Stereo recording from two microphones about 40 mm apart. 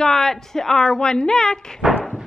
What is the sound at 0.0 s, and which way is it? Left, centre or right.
Speech, centre.